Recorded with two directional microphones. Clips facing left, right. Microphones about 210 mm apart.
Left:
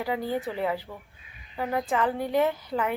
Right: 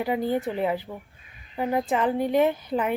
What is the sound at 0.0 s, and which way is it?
A woman's voice, 20° right (ahead or behind).